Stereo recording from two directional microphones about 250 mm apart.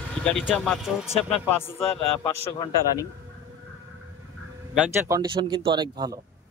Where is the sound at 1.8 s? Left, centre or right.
Left.